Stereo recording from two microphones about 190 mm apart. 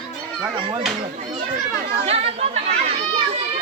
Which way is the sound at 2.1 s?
30° right (ahead or behind).